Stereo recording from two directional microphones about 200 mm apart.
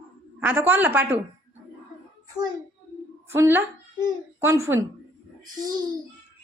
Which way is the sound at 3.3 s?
10° right (ahead or behind).